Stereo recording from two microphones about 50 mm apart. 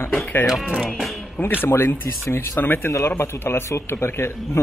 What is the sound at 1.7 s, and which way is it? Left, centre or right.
Speech, left.